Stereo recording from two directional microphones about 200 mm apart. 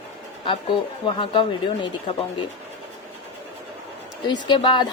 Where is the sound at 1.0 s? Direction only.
25° left (ahead or behind).